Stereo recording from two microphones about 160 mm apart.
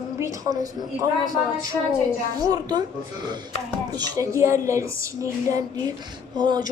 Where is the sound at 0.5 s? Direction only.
25° right (ahead or behind).